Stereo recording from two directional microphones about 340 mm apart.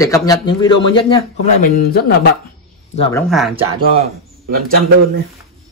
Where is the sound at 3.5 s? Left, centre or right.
Right.